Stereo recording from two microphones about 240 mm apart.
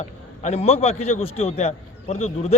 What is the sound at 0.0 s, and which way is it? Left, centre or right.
A man's voice, left.